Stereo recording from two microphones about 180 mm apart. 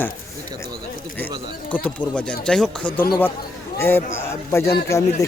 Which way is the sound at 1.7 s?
5° left (ahead or behind).